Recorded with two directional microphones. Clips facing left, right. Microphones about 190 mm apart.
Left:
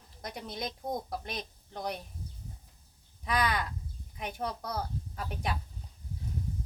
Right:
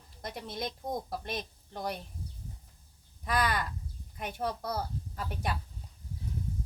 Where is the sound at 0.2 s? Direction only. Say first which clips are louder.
Right 1 dB; centre (ahead or behind).